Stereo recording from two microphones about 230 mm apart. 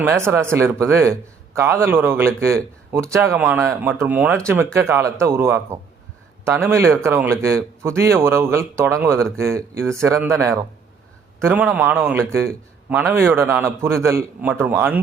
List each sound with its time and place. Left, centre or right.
0.0 s a man's voice: centre
6.7 s a man's voice: centre